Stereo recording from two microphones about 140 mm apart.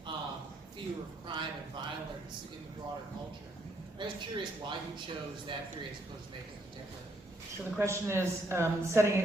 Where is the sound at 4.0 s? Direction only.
35° right (ahead or behind).